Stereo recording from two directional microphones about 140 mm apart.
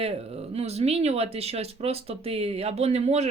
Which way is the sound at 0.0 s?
45° right (ahead or behind).